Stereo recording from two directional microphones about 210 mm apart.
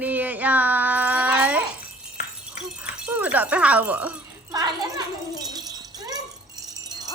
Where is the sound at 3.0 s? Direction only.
5° right (ahead or behind).